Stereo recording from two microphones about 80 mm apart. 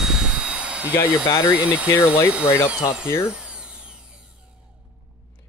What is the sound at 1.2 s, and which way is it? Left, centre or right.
Speech, left.